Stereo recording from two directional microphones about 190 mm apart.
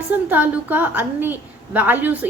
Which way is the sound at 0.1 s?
10° right (ahead or behind).